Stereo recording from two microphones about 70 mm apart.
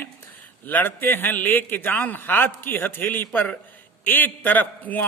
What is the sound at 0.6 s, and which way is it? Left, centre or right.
A man's voice, left.